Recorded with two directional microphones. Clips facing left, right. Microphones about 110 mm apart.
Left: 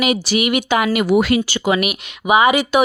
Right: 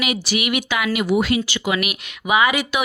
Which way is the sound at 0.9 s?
60° left (ahead or behind).